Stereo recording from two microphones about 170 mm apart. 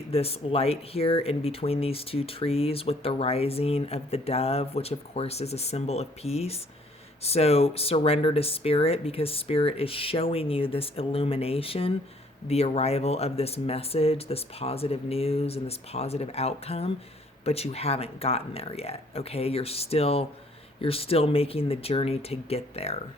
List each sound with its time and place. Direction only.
0.1 s speech: 35° left (ahead or behind)